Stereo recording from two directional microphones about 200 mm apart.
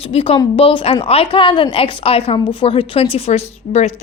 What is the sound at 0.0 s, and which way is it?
A woman's voice, 30° left (ahead or behind).